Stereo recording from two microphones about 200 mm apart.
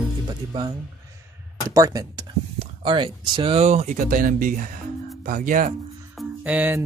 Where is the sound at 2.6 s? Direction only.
25° right (ahead or behind); by 5.7 s 40° right (ahead or behind).